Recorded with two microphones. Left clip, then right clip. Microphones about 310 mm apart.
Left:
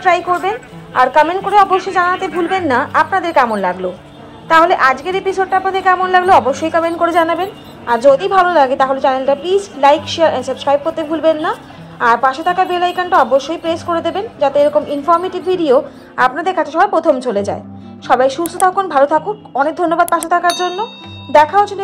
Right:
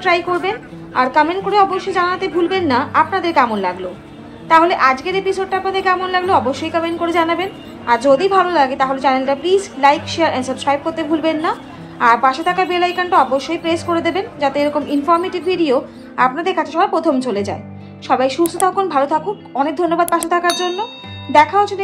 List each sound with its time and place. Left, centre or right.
0.0 s a woman's voice: left
4.5 s a woman's voice: left